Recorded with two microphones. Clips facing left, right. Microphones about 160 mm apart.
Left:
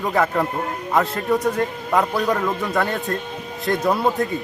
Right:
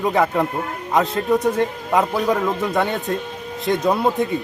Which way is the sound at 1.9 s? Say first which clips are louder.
Even; 10° right (ahead or behind).